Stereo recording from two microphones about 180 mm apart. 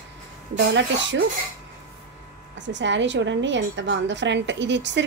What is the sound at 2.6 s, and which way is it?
A woman's voice, 85° right.